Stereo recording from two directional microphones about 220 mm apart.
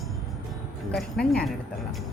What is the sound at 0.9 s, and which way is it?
Speech, centre (ahead or behind).